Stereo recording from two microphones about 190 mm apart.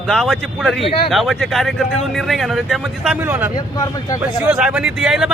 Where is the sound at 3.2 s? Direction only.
10° right (ahead or behind).